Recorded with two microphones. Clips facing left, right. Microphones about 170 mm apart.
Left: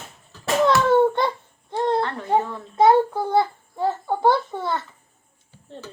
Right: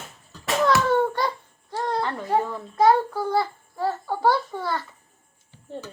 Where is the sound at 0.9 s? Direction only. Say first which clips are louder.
Left 4 dB; 20° left (ahead or behind).